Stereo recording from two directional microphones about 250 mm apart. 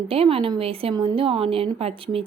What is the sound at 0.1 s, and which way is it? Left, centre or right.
A woman's voice, right.